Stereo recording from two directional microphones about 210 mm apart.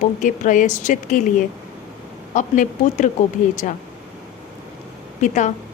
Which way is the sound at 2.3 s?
35° left (ahead or behind).